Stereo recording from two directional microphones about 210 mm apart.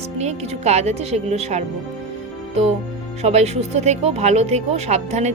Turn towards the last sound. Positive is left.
turn(degrees=-30)  # may be behind; listen again after turning